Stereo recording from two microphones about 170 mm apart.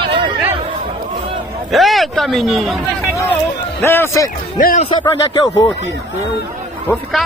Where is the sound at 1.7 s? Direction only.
Centre (ahead or behind).